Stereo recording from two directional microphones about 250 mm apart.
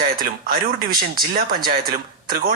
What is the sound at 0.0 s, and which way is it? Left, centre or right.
Speech, right.